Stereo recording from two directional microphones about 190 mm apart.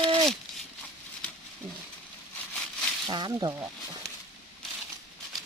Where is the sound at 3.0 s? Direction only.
20° right (ahead or behind).